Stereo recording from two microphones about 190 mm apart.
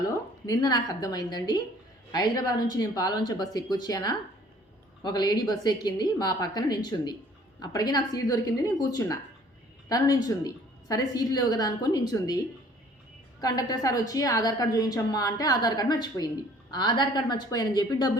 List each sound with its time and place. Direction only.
0.1 s a woman's voice: 20° left (ahead or behind)
13.4 s a woman's voice: 20° left (ahead or behind)